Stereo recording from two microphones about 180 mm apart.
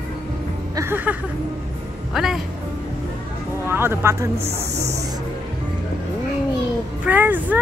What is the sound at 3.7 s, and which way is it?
Speech, 15° right (ahead or behind).